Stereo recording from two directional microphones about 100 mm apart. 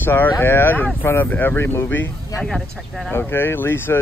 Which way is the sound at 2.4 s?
5° left (ahead or behind).